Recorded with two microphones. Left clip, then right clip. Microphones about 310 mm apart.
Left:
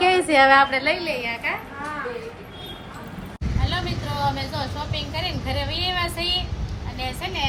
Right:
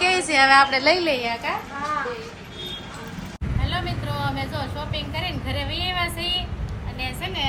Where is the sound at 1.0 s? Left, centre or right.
Right.